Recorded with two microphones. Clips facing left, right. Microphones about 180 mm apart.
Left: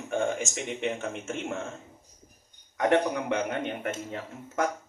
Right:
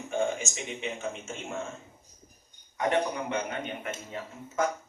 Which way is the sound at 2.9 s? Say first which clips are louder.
Left 3 dB; 65° left (ahead or behind).